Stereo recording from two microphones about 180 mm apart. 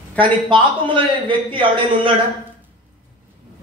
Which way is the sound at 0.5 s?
25° right (ahead or behind).